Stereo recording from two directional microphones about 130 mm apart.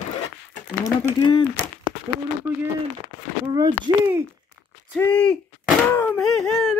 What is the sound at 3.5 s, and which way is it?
Speech, 30° right (ahead or behind).